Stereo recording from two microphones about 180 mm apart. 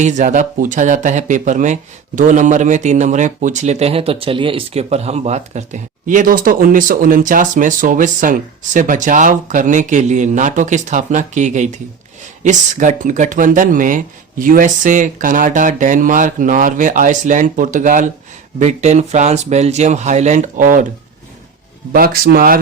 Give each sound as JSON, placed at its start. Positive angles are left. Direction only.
{"t": 0.0, "sound": "speech", "side_deg": -40}
{"t": 21.9, "sound": "speech", "side_deg": -55}